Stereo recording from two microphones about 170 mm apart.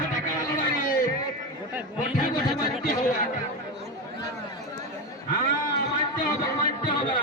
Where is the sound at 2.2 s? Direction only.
50° left (ahead or behind).